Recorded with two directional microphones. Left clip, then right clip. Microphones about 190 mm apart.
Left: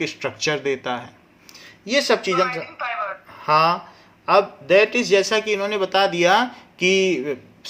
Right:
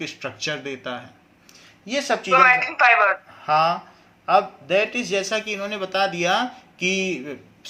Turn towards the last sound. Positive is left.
turn(degrees=40)  # may be behind; listen again after turning